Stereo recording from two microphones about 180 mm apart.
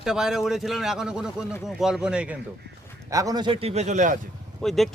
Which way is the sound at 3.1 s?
20° right (ahead or behind).